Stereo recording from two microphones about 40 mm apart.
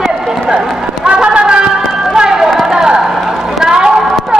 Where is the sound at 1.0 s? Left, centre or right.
Right.